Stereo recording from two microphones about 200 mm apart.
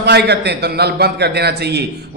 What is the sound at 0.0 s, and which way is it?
A man's voice, 55° right (ahead or behind).